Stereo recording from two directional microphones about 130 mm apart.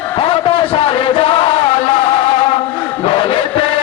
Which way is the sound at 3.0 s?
45° left (ahead or behind).